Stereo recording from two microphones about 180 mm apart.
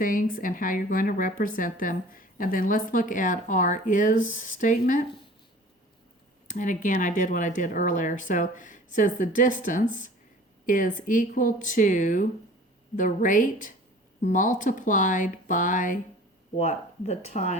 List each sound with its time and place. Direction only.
0.0 s a woman's voice: 50° left (ahead or behind)
6.5 s a woman's voice: 45° left (ahead or behind)